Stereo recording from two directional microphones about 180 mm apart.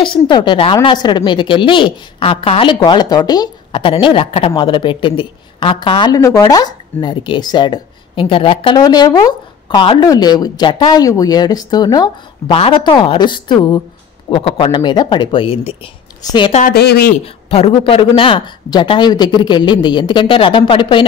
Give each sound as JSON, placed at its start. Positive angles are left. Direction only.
{"t": 0.0, "sound": "a woman's voice", "side_deg": 25}
{"t": 16.7, "sound": "speech", "side_deg": 60}
{"t": 17.2, "sound": "a woman's voice", "side_deg": 30}